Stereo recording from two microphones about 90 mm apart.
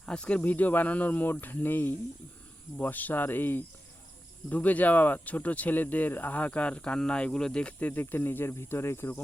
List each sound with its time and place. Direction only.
0.0 s speech: 10° left (ahead or behind)